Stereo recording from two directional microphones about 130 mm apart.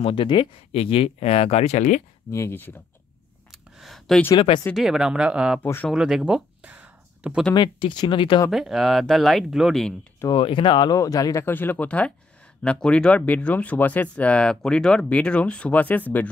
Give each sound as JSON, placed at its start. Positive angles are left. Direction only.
{"t": 0.0, "sound": "speech", "side_deg": 40}
{"t": 2.3, "sound": "speech", "side_deg": 20}
{"t": 3.5, "sound": "a sound", "side_deg": 0}
{"t": 4.7, "sound": "speech", "side_deg": -5}
{"t": 5.6, "sound": "speech", "side_deg": 15}
{"t": 5.9, "sound": "speech", "side_deg": -5}
{"t": 7.5, "sound": "speech", "side_deg": 35}
{"t": 8.5, "sound": "speech", "side_deg": 0}
{"t": 10.3, "sound": "speech", "side_deg": 40}
{"t": 11.4, "sound": "speech", "side_deg": 15}